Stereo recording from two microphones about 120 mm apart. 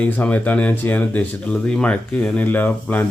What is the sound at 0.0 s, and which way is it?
Speech, 10° left (ahead or behind).